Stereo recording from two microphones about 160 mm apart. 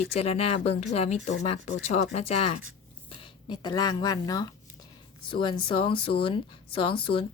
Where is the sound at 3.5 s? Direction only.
25° left (ahead or behind).